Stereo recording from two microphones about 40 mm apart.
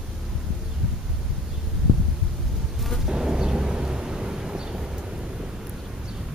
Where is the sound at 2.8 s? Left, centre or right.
Centre.